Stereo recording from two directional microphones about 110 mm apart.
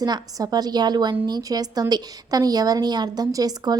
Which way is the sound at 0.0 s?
35° right (ahead or behind).